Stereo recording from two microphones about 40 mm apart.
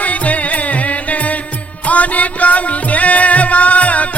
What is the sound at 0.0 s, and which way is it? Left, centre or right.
Music, left.